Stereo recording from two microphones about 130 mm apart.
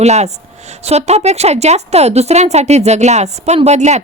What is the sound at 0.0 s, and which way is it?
A woman's voice, 60° right (ahead or behind).